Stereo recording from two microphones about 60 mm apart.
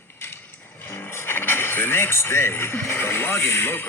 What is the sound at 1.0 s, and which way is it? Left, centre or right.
Speech, left.